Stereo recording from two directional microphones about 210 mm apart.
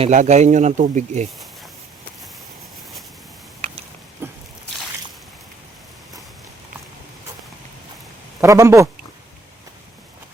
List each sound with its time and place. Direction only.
0.0 s speech: 35° right (ahead or behind)
4.2 s a sound: 10° right (ahead or behind)
8.4 s speech: 15° right (ahead or behind)